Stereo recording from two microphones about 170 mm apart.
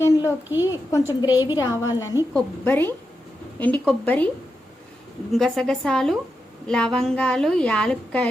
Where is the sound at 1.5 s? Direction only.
20° left (ahead or behind).